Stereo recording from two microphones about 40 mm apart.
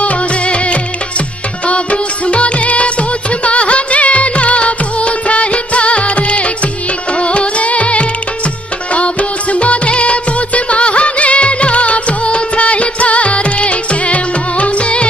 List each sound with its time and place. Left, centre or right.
0.0 s music: left
1.7 s music of bollywood: left
7.2 s carnatic music: left
8.9 s music of bollywood: left